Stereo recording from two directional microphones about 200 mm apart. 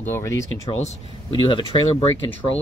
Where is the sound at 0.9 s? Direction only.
25° left (ahead or behind).